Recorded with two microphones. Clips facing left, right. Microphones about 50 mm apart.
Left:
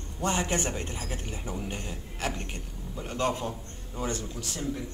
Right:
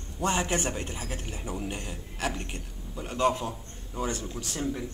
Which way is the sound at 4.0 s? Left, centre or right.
Centre.